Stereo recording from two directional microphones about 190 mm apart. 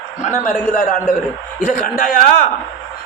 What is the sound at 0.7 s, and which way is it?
A man's voice, 40° left (ahead or behind).